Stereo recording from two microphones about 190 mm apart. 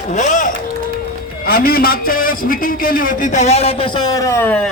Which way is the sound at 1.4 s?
50° left (ahead or behind).